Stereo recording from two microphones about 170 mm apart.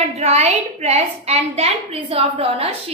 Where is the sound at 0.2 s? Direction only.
40° right (ahead or behind).